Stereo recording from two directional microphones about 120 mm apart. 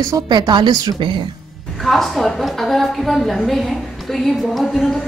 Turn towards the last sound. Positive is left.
turn(degrees=5)  # may be behind; listen again after turning